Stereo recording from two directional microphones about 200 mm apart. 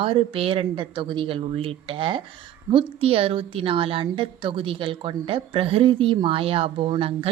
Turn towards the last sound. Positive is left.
turn(degrees=-25)  # may be behind; listen again after turning